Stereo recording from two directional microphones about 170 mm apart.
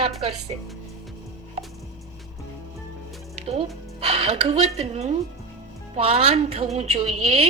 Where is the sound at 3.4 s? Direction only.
35° right (ahead or behind).